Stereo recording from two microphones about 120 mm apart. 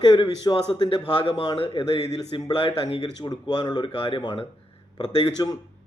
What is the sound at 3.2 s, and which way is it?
Speech, 35° left (ahead or behind).